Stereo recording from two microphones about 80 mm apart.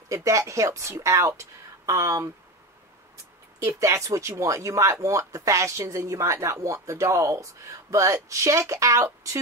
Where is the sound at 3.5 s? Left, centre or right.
Right.